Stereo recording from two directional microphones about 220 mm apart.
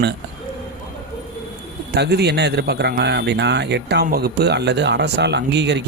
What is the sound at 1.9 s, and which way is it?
A man's voice, 50° right (ahead or behind).